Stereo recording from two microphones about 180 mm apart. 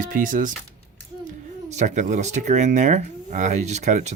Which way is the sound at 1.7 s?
40° right (ahead or behind).